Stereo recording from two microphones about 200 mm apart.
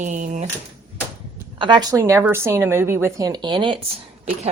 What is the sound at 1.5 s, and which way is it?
Speech, 25° right (ahead or behind).